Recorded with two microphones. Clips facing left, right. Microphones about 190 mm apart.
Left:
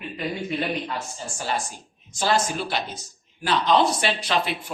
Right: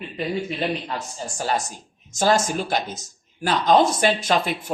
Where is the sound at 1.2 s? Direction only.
40° right (ahead or behind).